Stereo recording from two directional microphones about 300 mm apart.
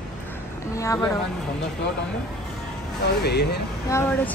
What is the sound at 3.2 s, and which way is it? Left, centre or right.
Speech, left.